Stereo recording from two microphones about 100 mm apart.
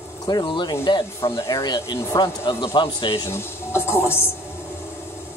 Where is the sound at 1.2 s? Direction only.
30° left (ahead or behind); by 3.2 s 55° left (ahead or behind).